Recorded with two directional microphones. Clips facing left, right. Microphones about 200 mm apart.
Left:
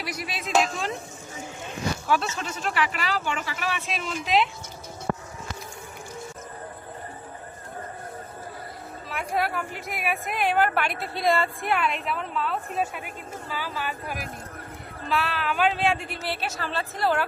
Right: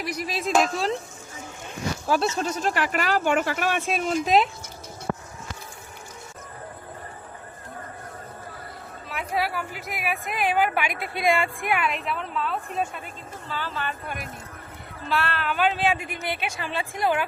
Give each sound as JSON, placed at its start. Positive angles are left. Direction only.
{"t": 0.1, "sound": "speech", "side_deg": -35}
{"t": 2.0, "sound": "speech", "side_deg": -35}
{"t": 9.0, "sound": "speech", "side_deg": 0}
{"t": 10.9, "sound": "speech", "side_deg": 25}
{"t": 11.3, "sound": "a woman's voice", "side_deg": -15}